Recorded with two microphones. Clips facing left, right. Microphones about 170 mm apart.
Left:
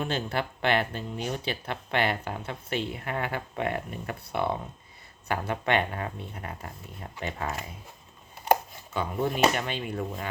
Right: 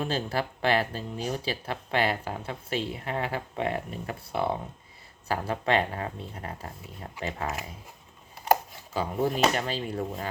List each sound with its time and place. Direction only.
0.0 s speech: 30° right (ahead or behind)
8.9 s speech: 35° right (ahead or behind)